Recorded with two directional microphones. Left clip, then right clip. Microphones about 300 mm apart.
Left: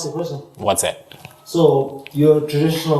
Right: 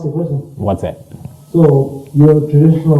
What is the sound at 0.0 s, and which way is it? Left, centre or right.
Speech, centre.